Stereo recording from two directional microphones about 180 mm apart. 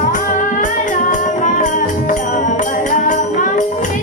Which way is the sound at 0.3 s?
45° left (ahead or behind).